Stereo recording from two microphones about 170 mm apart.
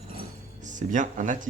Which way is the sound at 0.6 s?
50° right (ahead or behind).